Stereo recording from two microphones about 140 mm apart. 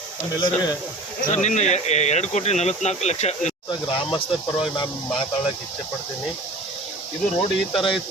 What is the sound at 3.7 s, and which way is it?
Speech, 35° left (ahead or behind).